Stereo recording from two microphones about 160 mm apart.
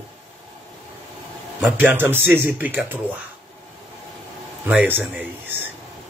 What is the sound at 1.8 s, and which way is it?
Speech, 10° right (ahead or behind).